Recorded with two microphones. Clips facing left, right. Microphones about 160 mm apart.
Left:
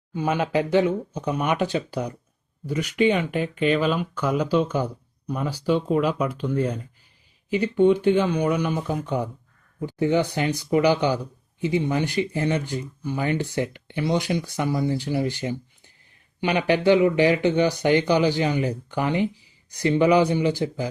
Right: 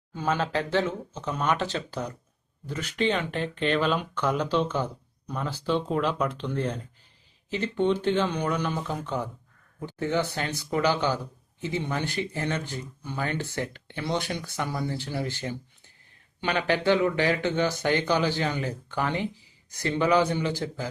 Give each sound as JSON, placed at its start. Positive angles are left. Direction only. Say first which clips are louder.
{"t": 0.1, "sound": "speech", "louder": "left 4 dB", "side_deg": 15}